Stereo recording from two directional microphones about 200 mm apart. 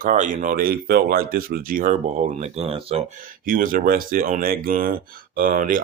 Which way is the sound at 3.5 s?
45° right (ahead or behind).